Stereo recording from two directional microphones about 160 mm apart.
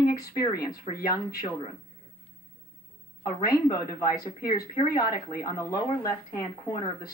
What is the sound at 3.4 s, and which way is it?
Speech, 20° left (ahead or behind).